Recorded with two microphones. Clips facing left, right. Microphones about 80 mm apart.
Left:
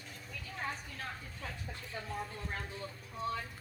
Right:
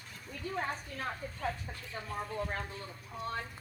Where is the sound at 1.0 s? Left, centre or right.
Right.